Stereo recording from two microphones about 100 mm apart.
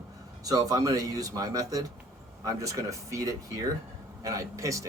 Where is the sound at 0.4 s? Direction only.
35° right (ahead or behind).